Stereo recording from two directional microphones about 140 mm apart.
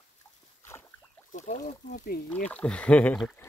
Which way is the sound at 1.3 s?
70° left (ahead or behind).